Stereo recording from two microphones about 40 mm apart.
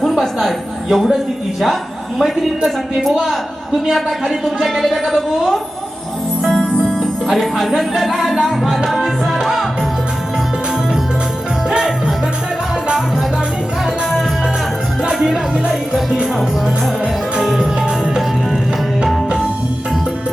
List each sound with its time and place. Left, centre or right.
0.0 s a sound: centre
1.6 s a man's voice: centre
3.9 s a woman's voice: centre
6.5 s music: left
7.3 s a woman's voice: centre
8.6 s music: centre
15.7 s music: centre
17.6 s music: right